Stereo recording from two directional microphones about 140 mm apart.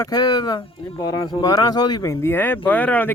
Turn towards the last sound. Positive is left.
turn(degrees=10)  # may be behind; listen again after turning